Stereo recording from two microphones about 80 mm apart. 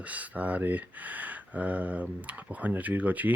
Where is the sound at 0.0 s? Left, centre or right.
Centre.